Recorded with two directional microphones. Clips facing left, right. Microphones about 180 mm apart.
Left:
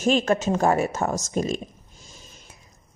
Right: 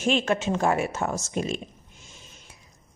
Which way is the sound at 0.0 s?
40° left (ahead or behind).